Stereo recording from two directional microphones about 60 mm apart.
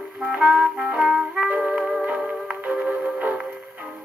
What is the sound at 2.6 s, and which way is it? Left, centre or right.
Music, right.